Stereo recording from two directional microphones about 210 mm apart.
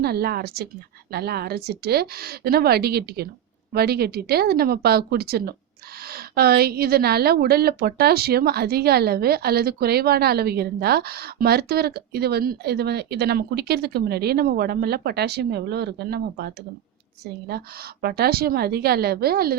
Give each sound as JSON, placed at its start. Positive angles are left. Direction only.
{"t": 0.0, "sound": "a woman's voice", "side_deg": -50}
{"t": 17.5, "sound": "a woman's voice", "side_deg": -50}